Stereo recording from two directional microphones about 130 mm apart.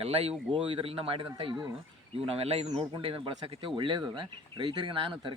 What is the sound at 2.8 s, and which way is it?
A man's voice, 40° right (ahead or behind).